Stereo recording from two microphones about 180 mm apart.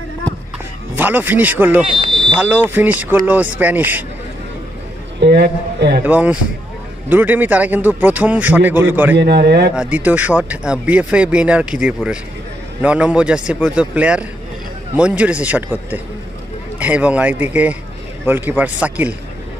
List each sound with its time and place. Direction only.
0.9 s speech: 10° right (ahead or behind)
1.9 s fire alarm: 35° right (ahead or behind)
2.2 s speech: 5° right (ahead or behind)
5.2 s a man's voice: 70° right (ahead or behind)
6.0 s speech: 10° right (ahead or behind)
9.1 s a man's voice: 65° right (ahead or behind)
9.8 s a man's voice: 10° right (ahead or behind)